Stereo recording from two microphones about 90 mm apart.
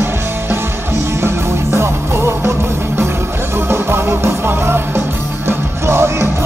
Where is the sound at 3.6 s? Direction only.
25° right (ahead or behind).